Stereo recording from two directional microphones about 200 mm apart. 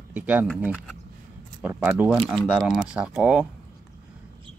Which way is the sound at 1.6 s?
10° right (ahead or behind).